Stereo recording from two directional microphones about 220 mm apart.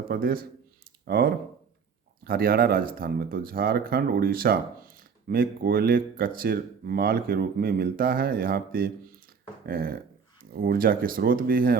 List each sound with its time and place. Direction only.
0.1 s speech: 40° right (ahead or behind)
9.6 s a sound: 45° right (ahead or behind)
10.5 s speech: 40° right (ahead or behind)